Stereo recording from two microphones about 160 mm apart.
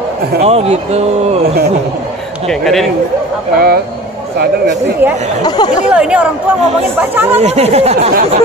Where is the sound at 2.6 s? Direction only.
Centre (ahead or behind).